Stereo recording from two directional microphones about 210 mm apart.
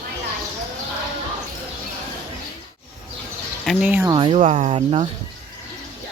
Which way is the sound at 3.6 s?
5° right (ahead or behind).